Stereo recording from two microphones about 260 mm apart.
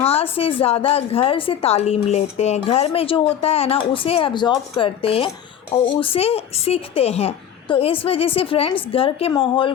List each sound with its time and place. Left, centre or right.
0.0 s a woman's voice: left